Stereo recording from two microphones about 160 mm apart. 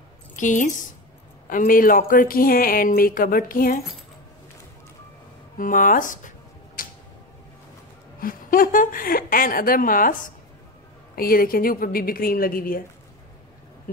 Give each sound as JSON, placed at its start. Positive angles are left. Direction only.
{"t": 0.4, "sound": "speech", "side_deg": 50}
{"t": 5.6, "sound": "speech", "side_deg": 55}
{"t": 6.8, "sound": "tick-tock", "side_deg": 60}
{"t": 8.2, "sound": "speech", "side_deg": 60}